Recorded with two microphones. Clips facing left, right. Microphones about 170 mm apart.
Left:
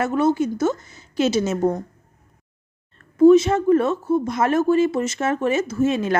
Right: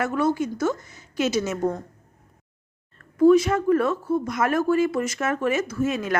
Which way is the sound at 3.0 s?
25° left (ahead or behind).